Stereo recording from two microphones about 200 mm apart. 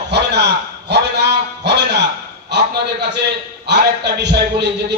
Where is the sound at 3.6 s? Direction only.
60° right (ahead or behind).